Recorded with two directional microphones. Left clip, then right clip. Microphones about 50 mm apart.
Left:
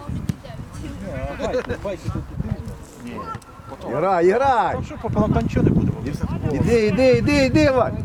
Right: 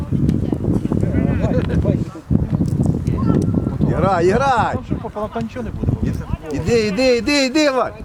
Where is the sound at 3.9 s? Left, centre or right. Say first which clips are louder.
Right 1 dB; right.